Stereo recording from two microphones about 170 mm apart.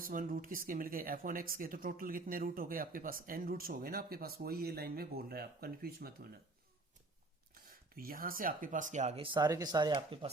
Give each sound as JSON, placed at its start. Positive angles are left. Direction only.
{"t": 0.0, "sound": "speech", "side_deg": -55}
{"t": 7.5, "sound": "speech", "side_deg": -60}